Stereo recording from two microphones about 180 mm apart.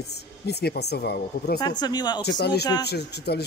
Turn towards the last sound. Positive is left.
turn(degrees=65)  # may be behind; listen again after turning